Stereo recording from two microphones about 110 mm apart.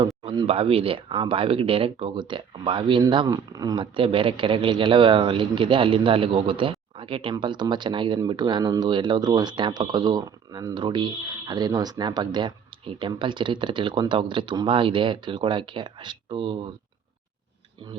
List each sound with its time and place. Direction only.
0.2 s a sound: 45° right (ahead or behind)
0.4 s speech: 60° right (ahead or behind); by 3.8 s 35° right (ahead or behind)
3.9 s speech: 50° right (ahead or behind)